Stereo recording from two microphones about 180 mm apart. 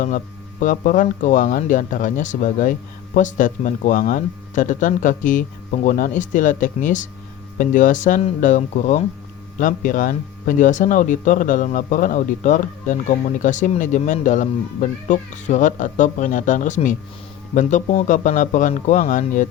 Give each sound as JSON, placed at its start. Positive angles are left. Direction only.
{"t": 0.6, "sound": "speech", "side_deg": 50}